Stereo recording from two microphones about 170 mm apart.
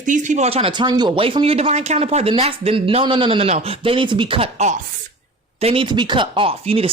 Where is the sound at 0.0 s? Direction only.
45° right (ahead or behind).